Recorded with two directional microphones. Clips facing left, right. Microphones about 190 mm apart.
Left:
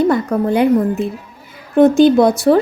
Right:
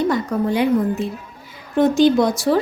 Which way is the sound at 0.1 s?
55° left (ahead or behind).